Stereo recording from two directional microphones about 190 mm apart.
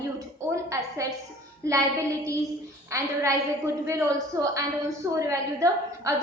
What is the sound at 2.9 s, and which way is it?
A woman's voice, 15° right (ahead or behind).